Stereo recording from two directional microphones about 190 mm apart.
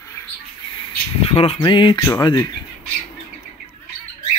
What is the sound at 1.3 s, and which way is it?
Speech, 30° left (ahead or behind).